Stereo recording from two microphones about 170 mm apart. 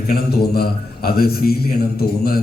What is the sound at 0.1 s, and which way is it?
A man's voice, 65° left (ahead or behind).